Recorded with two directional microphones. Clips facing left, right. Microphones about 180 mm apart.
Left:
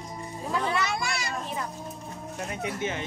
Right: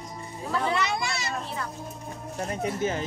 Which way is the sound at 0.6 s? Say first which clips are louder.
Right 3 dB; 20° right (ahead or behind).